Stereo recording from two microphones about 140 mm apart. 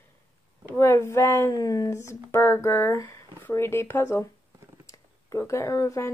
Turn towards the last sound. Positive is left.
turn(degrees=20)  # may be behind; listen again after turning